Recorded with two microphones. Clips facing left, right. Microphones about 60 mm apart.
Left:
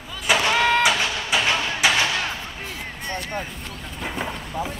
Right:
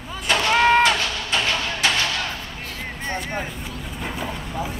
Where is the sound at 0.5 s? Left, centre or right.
Right.